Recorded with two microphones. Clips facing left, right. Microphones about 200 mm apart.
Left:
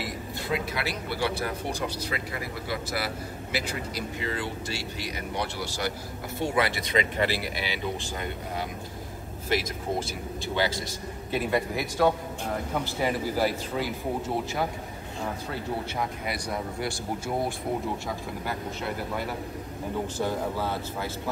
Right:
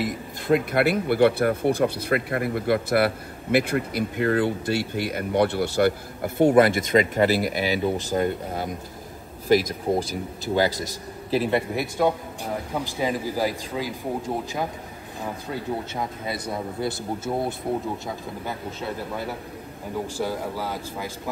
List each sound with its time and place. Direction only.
0.0 s speech: 50° right (ahead or behind)
10.5 s a man's voice: 40° right (ahead or behind)
12.7 s speech: 15° right (ahead or behind)
16.8 s speech: 20° right (ahead or behind)
20.2 s speech: 10° right (ahead or behind)